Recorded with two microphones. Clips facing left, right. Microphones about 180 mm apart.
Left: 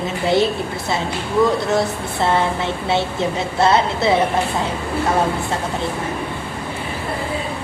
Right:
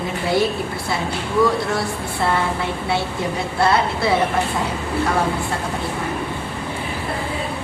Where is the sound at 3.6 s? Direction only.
20° left (ahead or behind).